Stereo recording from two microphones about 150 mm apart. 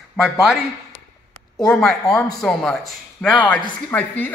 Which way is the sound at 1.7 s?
5° left (ahead or behind).